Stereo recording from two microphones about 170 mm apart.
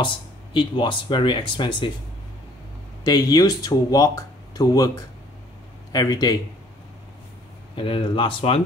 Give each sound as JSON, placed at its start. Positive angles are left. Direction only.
{"t": 0.0, "sound": "speech", "side_deg": 30}
{"t": 3.0, "sound": "speech", "side_deg": 20}
{"t": 7.7, "sound": "speech", "side_deg": 30}